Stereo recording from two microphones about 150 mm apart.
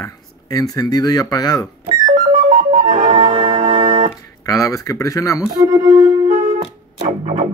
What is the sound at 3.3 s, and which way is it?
Organ, 35° right (ahead or behind).